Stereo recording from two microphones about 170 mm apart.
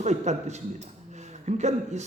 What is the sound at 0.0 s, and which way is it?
A man's voice, 40° right (ahead or behind).